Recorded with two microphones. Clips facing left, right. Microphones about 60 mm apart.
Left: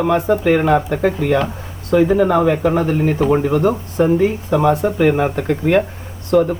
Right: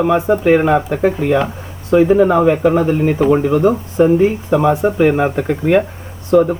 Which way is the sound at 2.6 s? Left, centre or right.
Centre.